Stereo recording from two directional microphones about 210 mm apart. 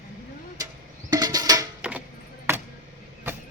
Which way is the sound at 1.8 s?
5° right (ahead or behind).